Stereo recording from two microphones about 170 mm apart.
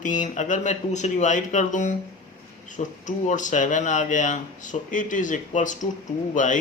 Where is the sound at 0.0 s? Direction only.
50° left (ahead or behind).